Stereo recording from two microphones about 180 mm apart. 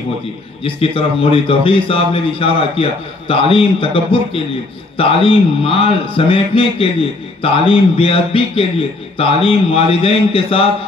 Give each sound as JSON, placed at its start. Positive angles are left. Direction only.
{"t": 0.7, "sound": "a man's voice", "side_deg": 30}